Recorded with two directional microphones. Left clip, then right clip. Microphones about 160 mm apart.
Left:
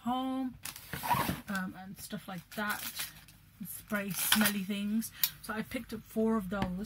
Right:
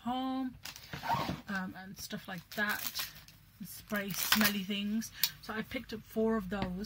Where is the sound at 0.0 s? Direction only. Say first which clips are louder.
Left 2 dB; 10° right (ahead or behind).